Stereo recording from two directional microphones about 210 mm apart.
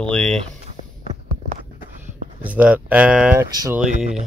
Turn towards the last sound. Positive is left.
turn(degrees=-35)  # may be behind; listen again after turning